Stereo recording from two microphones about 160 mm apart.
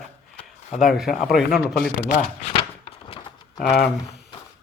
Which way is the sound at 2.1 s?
55° left (ahead or behind).